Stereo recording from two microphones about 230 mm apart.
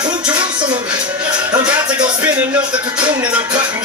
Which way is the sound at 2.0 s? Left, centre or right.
Centre.